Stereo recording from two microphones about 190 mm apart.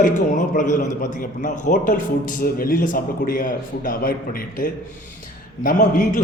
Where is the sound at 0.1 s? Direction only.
40° left (ahead or behind).